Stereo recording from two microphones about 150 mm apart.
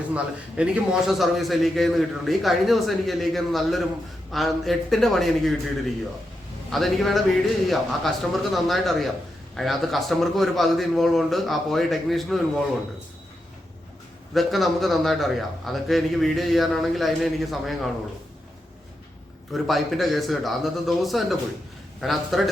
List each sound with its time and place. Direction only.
0.1 s a man's voice: 5° right (ahead or behind)
6.7 s a man's voice: centre (ahead or behind)
14.3 s a man's voice: centre (ahead or behind)
19.5 s a man's voice: centre (ahead or behind)